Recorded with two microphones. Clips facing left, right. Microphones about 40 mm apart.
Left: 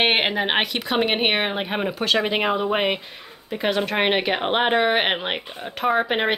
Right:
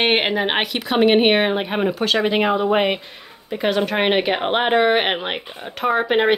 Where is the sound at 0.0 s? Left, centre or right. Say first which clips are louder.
Right 2 dB; centre.